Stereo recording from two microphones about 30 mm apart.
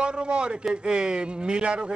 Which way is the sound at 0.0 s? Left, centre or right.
Right.